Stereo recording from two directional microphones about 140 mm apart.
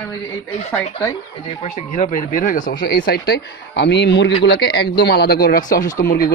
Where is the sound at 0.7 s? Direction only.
20° left (ahead or behind).